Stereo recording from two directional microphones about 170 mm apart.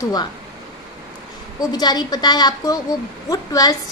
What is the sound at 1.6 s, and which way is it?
A woman's voice, 25° left (ahead or behind).